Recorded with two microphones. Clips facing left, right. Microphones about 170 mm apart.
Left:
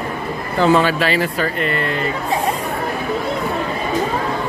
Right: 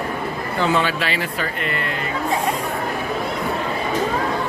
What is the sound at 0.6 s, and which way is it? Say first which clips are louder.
Speech: left 6 dB; 40° left (ahead or behind).